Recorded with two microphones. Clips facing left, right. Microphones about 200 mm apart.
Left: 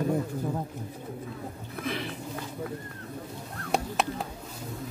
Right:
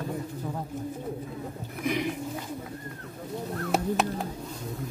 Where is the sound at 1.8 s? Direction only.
15° right (ahead or behind).